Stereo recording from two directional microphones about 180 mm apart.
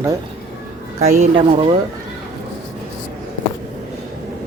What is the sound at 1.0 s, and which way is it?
Speech, 35° right (ahead or behind).